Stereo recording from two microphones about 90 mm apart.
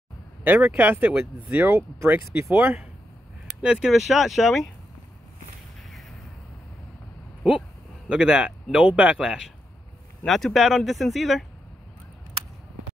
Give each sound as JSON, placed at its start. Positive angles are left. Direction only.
{"t": 0.4, "sound": "speech", "side_deg": -20}
{"t": 3.6, "sound": "speech", "side_deg": -5}
{"t": 5.9, "sound": "a sound", "side_deg": 0}
{"t": 8.1, "sound": "speech", "side_deg": -10}
{"t": 10.2, "sound": "speech", "side_deg": 5}